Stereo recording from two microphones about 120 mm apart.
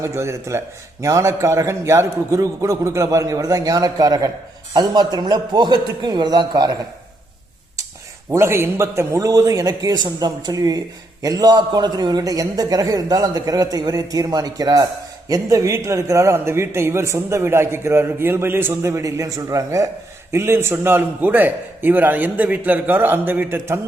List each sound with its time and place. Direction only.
0.0 s a man's voice: 25° right (ahead or behind)
8.3 s a man's voice: 20° right (ahead or behind)